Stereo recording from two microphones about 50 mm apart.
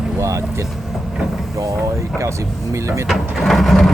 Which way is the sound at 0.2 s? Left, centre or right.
Right.